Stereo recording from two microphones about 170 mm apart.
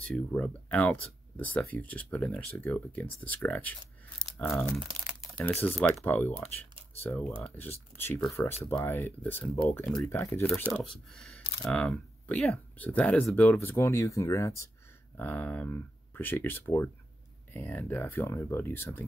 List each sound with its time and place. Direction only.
0.0 s speech: 5° left (ahead or behind)
10.6 s speech: centre (ahead or behind)